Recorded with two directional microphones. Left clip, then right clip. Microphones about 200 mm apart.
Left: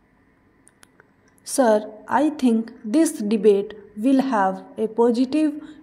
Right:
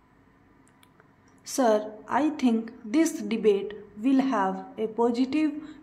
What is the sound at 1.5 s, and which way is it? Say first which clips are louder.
A woman's voice: left 5 dB; 20° left (ahead or behind).